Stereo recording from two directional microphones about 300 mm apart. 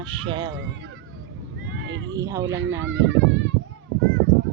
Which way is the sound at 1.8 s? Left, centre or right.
Right.